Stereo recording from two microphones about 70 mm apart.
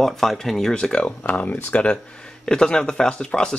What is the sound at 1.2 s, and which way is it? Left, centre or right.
Speech, left.